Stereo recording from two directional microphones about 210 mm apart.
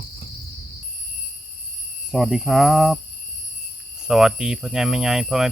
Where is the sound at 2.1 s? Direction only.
Centre (ahead or behind).